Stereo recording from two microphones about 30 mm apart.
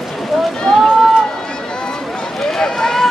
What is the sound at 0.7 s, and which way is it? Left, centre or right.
Run, centre.